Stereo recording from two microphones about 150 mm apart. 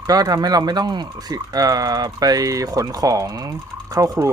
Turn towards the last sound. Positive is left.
turn(degrees=-20)  # may be behind; listen again after turning